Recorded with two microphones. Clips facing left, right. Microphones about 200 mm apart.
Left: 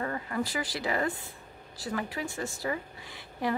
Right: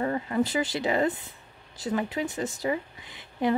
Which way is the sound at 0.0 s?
25° right (ahead or behind).